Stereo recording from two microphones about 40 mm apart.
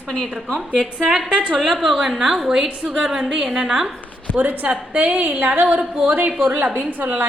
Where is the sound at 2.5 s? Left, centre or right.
Right.